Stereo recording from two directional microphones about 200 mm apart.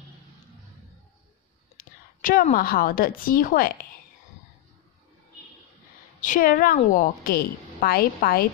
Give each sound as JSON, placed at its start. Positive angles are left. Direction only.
{"t": 1.8, "sound": "a woman's voice", "side_deg": 45}
{"t": 6.2, "sound": "a woman's voice", "side_deg": 45}